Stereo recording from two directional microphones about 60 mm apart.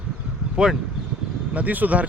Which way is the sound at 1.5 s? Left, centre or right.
Right.